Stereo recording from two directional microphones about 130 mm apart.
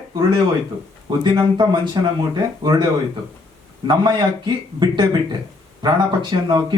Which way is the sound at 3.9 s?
35° right (ahead or behind).